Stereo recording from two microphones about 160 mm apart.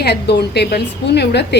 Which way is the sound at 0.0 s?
90° left.